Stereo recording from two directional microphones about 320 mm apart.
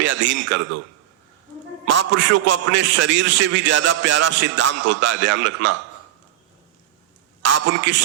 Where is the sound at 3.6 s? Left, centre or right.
Right.